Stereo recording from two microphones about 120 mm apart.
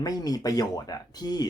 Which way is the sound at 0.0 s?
30° left (ahead or behind).